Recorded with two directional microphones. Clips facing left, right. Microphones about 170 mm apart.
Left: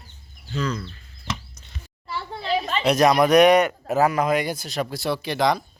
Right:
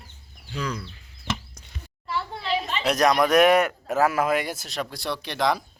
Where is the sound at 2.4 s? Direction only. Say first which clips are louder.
Left 5 dB; 45° left (ahead or behind).